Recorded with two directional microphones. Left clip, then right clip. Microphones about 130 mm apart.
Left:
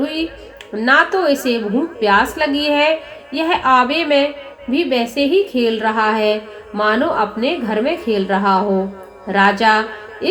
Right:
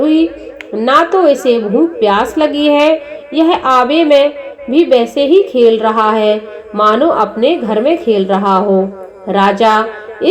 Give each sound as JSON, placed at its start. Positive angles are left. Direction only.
{"t": 0.8, "sound": "a woman's voice", "side_deg": -40}